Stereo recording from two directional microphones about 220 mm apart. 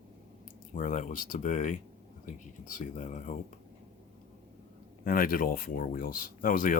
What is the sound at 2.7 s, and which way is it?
Speech, 35° left (ahead or behind).